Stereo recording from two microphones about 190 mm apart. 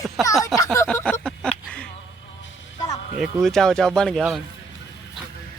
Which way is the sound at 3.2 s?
Centre (ahead or behind).